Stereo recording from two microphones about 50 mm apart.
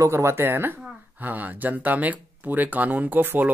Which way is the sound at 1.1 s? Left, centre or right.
Right.